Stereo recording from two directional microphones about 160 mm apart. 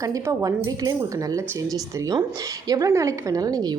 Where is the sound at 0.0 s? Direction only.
20° right (ahead or behind).